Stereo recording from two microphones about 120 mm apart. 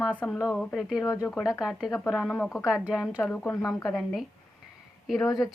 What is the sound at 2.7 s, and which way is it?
Speech, 5° right (ahead or behind).